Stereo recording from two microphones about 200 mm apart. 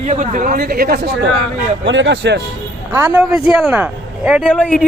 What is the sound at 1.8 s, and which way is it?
Speech, 65° right (ahead or behind).